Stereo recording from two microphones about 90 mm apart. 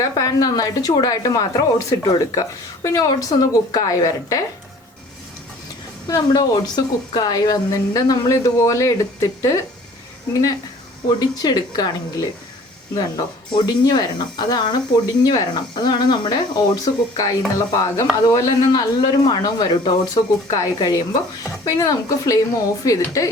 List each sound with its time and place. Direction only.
0.2 s speech: 40° left (ahead or behind)
6.1 s speech: 50° left (ahead or behind)
8.3 s speech: 35° left (ahead or behind)
11.2 s speech: 45° left (ahead or behind)
13.5 s speech: 60° left (ahead or behind)
13.8 s speech: 50° left (ahead or behind)